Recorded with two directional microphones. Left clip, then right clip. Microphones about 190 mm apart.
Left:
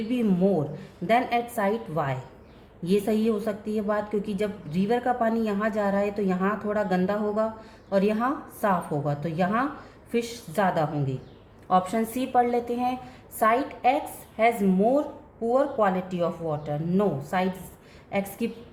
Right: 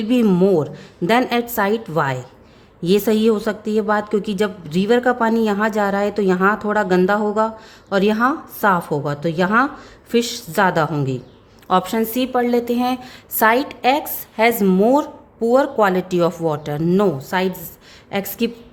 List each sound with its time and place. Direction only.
0.1 s a woman's voice: 50° right (ahead or behind)